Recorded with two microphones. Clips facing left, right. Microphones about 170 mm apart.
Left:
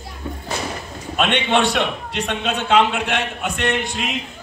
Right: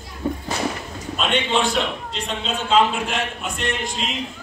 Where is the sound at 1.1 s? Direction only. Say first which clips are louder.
Left 3 dB; 70° left (ahead or behind).